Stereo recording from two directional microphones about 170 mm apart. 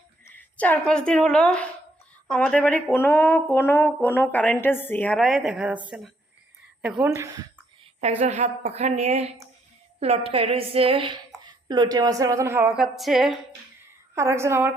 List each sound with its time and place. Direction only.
0.3 s a woman's voice: 10° left (ahead or behind); by 5.8 s 5° right (ahead or behind)
6.8 s a sound: 5° right (ahead or behind)
7.1 s a woman's voice: 15° right (ahead or behind)
8.2 s a woman's voice: 40° right (ahead or behind); by 12.7 s 15° right (ahead or behind)
12.7 s a sound: centre (ahead or behind)
14.2 s a woman's voice: 15° right (ahead or behind)